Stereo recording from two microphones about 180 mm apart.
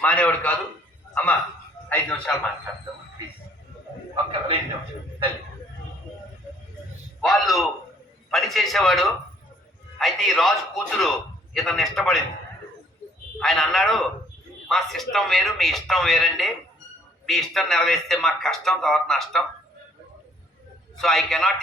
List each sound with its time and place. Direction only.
0.0 s a man's voice: 10° left (ahead or behind)
4.1 s a sound: 30° right (ahead or behind)
7.2 s a man's voice: centre (ahead or behind)
13.4 s a man's voice: centre (ahead or behind)
21.0 s a man's voice: centre (ahead or behind)